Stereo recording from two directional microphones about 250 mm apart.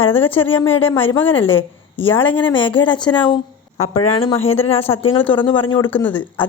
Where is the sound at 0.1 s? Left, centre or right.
Centre.